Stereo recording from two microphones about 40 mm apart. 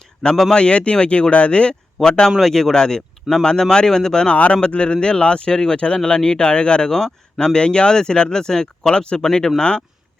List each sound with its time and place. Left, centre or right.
0.2 s speech: centre
2.0 s speech: centre